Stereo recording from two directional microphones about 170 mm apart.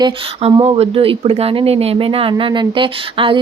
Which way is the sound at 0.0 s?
25° right (ahead or behind).